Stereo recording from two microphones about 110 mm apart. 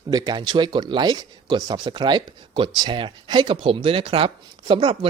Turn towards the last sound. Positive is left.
turn(degrees=-45)  # may be behind; listen again after turning